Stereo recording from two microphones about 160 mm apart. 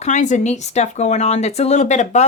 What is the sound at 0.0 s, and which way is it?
Speech, 50° left (ahead or behind).